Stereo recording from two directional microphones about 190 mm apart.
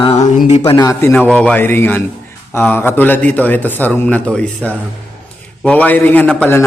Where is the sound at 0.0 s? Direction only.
30° left (ahead or behind).